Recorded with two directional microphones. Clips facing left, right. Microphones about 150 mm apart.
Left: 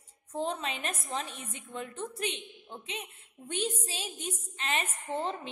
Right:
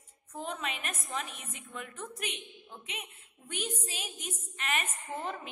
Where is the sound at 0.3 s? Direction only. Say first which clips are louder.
Left 4 dB; 30° left (ahead or behind).